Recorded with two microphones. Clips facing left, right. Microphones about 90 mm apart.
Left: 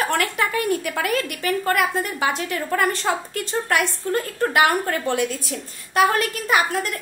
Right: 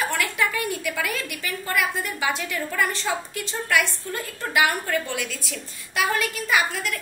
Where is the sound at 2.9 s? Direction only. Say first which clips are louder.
Left 4 dB; 50° left (ahead or behind).